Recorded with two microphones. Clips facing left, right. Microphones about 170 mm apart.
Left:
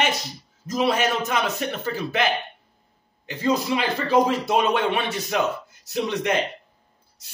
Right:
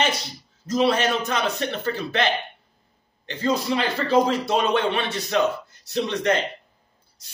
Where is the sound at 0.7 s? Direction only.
5° left (ahead or behind).